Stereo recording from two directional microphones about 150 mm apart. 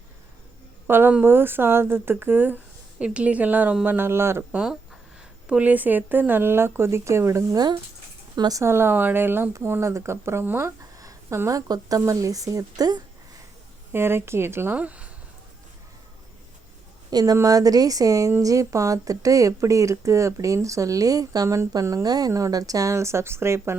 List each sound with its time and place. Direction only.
0.9 s speech: 15° right (ahead or behind)
17.1 s speech: 25° right (ahead or behind)